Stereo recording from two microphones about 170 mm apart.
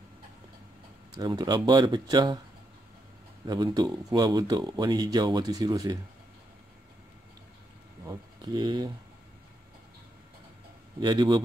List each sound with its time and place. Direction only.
1.1 s speech: 25° right (ahead or behind)
3.4 s speech: 25° right (ahead or behind)
8.0 s speech: 20° right (ahead or behind)
11.0 s speech: 25° right (ahead or behind)